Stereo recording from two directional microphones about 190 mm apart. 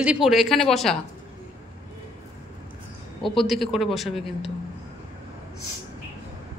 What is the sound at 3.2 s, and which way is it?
Speech, centre (ahead or behind).